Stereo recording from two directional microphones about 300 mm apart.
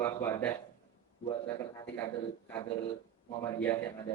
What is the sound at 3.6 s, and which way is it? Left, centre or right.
Speech, centre.